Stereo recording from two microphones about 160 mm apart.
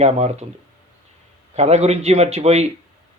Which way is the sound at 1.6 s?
40° right (ahead or behind).